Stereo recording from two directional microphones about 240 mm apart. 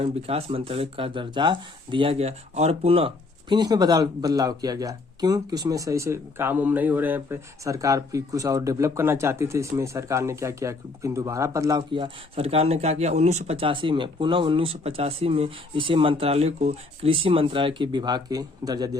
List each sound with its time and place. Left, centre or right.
0.0 s speech: right